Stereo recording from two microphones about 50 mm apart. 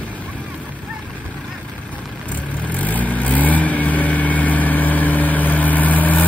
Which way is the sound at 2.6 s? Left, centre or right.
Left.